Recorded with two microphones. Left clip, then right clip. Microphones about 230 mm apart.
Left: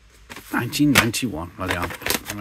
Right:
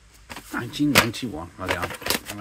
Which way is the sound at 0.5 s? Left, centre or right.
Left.